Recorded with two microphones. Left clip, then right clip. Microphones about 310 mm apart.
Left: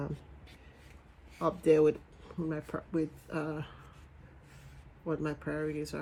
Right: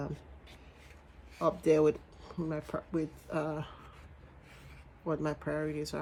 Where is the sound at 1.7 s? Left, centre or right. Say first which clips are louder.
Left 2 dB; centre.